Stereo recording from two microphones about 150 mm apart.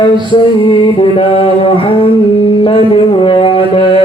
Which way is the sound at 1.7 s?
35° left (ahead or behind).